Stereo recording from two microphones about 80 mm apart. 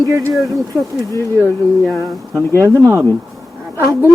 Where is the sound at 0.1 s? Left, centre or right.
Right.